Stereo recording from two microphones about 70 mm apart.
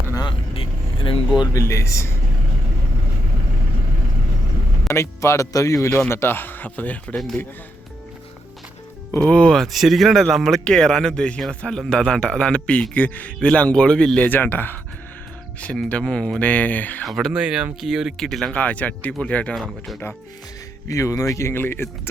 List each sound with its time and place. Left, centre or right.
1.5 s speech: left
4.9 s speech: left
6.1 s speech: left
9.3 s speech: centre
9.6 s speech: centre
14.3 s speech: left
15.6 s speech: centre
17.0 s speech: centre
17.3 s speech: centre
18.5 s speech: left
20.8 s speech: left
21.5 s speech: left